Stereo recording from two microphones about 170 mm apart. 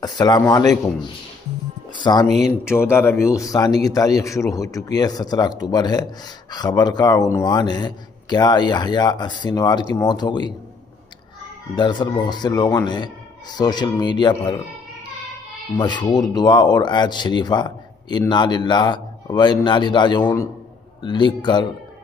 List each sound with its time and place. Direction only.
0.0 s a man's voice: 25° left (ahead or behind)
2.1 s a man's voice: 25° left (ahead or behind)
2.4 s a man's voice: 15° left (ahead or behind)
11.7 s a man's voice: 25° left (ahead or behind)
15.8 s a man's voice: 25° left (ahead or behind)